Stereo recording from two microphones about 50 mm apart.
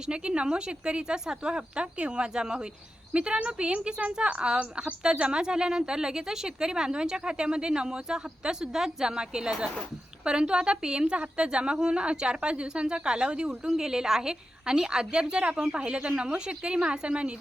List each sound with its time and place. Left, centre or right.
0.1 s a woman's voice: centre